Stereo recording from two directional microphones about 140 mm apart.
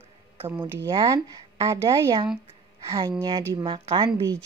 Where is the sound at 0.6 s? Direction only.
20° right (ahead or behind).